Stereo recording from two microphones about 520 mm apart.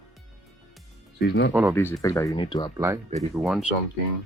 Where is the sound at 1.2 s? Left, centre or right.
Centre.